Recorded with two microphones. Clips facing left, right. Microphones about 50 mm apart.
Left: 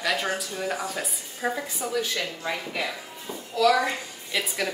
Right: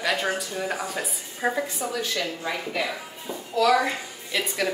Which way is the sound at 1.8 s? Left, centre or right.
Right.